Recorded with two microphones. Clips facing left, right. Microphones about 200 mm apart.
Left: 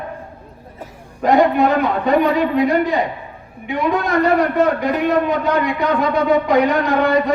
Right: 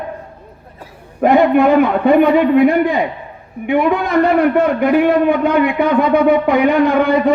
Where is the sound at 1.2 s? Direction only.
55° right (ahead or behind).